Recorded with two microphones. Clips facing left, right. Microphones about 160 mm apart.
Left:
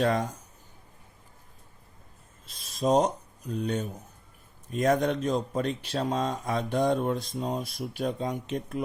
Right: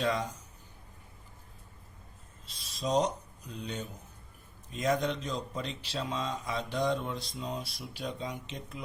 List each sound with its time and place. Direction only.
0.0 s speech: 55° left (ahead or behind)
2.5 s speech: 50° left (ahead or behind)